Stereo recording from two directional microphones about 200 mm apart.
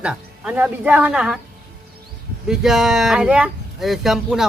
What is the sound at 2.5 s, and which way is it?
Speech, centre (ahead or behind).